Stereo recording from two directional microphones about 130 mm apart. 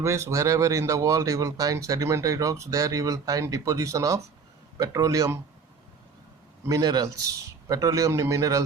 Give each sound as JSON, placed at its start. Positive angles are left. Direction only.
{"t": 0.0, "sound": "speech", "side_deg": -25}
{"t": 6.7, "sound": "speech", "side_deg": -30}